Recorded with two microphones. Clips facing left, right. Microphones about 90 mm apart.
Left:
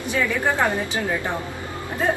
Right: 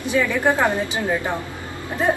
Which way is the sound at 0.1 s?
20° right (ahead or behind).